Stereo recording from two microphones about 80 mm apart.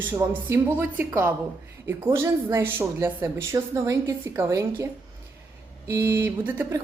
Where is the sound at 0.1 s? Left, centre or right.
Right.